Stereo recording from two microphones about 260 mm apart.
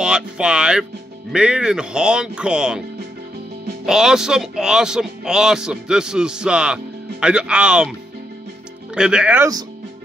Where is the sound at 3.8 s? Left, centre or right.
Centre.